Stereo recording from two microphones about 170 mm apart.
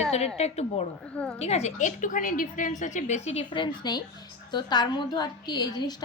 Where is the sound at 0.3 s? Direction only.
40° left (ahead or behind).